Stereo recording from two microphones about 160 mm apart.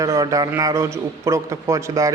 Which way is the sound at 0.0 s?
20° right (ahead or behind).